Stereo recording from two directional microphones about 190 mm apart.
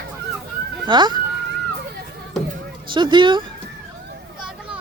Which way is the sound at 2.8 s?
25° right (ahead or behind).